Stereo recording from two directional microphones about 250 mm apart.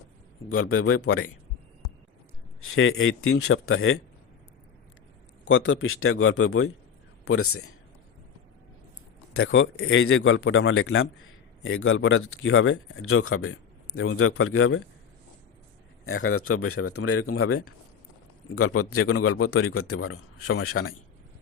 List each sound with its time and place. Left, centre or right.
0.5 s speech: left
2.6 s speech: left
5.5 s speech: left
9.3 s a man's voice: left
16.0 s speech: left